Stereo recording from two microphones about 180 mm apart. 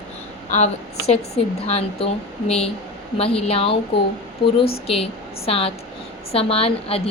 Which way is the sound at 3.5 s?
30° left (ahead or behind).